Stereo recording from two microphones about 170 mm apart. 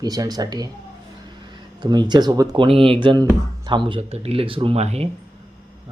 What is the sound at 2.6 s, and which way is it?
Speech, 35° right (ahead or behind).